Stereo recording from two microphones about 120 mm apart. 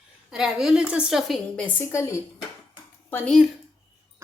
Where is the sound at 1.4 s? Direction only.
10° left (ahead or behind).